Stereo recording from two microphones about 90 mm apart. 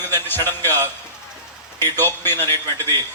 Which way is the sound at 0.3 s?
25° left (ahead or behind).